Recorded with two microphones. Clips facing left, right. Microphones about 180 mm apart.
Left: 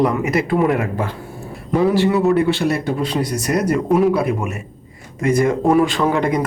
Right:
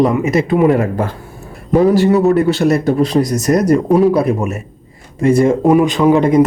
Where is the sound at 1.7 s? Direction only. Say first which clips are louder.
Right 5 dB; 45° right (ahead or behind); by 5.8 s 25° right (ahead or behind).